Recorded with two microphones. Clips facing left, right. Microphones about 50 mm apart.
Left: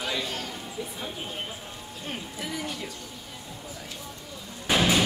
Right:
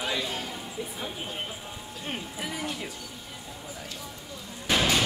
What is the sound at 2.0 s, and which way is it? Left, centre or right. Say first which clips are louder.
Music: right 1 dB; centre.